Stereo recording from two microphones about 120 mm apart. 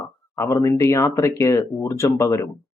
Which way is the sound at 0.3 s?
25° left (ahead or behind).